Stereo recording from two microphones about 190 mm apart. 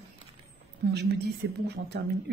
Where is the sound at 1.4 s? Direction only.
65° right (ahead or behind).